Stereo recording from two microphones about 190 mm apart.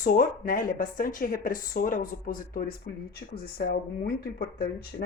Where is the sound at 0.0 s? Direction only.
45° left (ahead or behind).